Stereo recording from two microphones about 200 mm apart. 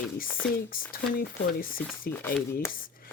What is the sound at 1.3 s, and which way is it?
Speech, 45° left (ahead or behind).